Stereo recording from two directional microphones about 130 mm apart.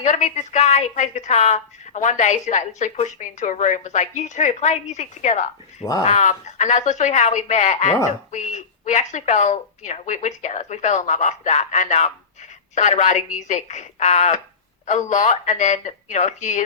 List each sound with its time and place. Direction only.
0.0 s a woman's voice: 65° left (ahead or behind)